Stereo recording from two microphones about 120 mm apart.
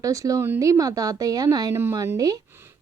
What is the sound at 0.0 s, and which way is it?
A woman's voice, 30° right (ahead or behind).